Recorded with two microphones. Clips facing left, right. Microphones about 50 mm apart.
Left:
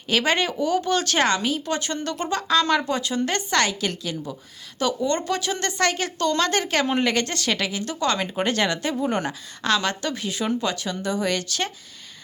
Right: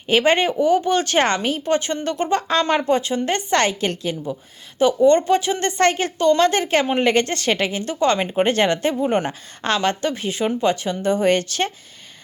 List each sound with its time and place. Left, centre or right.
0.1 s speech: right
6.1 s speech: right